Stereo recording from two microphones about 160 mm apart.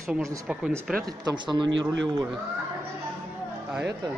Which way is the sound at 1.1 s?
30° right (ahead or behind).